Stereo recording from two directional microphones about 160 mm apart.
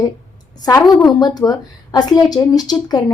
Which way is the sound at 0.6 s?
20° left (ahead or behind).